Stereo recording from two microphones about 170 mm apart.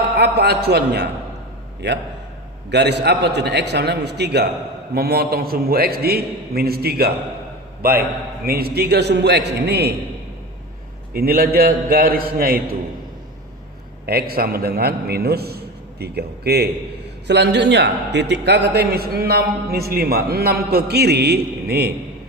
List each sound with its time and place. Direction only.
0.2 s a man's voice: 75° right (ahead or behind)
1.8 s a man's voice: 90° right
4.9 s a man's voice: 65° right (ahead or behind)
8.4 s a man's voice: 65° right (ahead or behind)
11.1 s a man's voice: 65° right (ahead or behind)
14.1 s a man's voice: 65° right (ahead or behind)
17.2 s a man's voice: 85° right